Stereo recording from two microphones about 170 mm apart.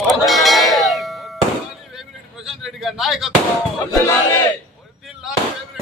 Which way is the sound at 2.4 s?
Centre (ahead or behind).